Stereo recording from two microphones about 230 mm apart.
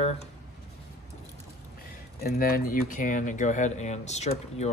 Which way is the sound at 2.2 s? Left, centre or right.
Left.